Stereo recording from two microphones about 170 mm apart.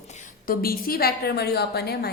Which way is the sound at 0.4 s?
60° left (ahead or behind).